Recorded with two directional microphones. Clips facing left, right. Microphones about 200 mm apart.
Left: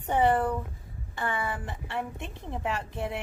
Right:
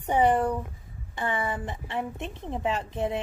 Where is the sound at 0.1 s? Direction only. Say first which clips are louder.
Right 2 dB; 15° right (ahead or behind).